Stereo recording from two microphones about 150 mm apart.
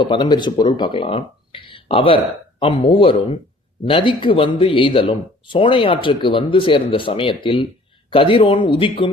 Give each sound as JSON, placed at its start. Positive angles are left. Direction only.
{"t": 0.0, "sound": "speech", "side_deg": 30}